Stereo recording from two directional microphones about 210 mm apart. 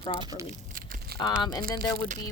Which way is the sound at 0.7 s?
40° right (ahead or behind).